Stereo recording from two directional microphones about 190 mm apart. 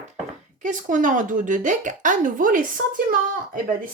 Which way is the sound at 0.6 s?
40° right (ahead or behind).